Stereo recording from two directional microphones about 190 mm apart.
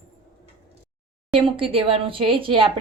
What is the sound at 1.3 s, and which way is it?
Speech, 30° right (ahead or behind).